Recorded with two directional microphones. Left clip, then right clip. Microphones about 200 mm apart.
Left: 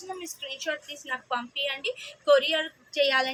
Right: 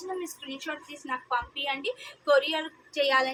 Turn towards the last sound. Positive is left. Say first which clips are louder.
# left 1 dB
turn(degrees=-20)  # may be behind; listen again after turning